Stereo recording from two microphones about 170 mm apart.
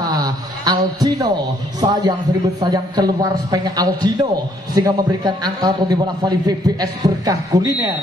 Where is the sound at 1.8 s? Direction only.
25° right (ahead or behind).